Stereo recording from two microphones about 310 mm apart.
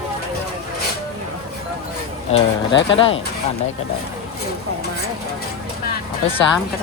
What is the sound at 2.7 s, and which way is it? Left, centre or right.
Speech, left.